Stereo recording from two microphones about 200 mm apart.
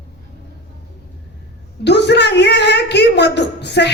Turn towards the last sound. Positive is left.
turn(degrees=55)  # may be behind; listen again after turning